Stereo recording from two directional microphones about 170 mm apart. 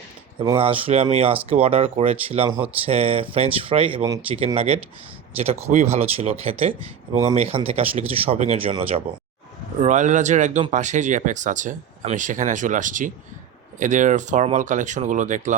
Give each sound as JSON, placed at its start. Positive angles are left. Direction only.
{"t": 0.3, "sound": "speech", "side_deg": -30}
{"t": 4.0, "sound": "speech", "side_deg": -20}
{"t": 4.4, "sound": "speech", "side_deg": -35}
{"t": 9.8, "sound": "speech", "side_deg": -45}